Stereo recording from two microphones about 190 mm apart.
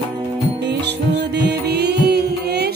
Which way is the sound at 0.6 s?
60° right (ahead or behind).